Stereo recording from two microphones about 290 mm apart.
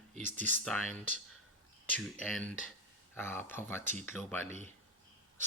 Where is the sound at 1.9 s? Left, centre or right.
Centre.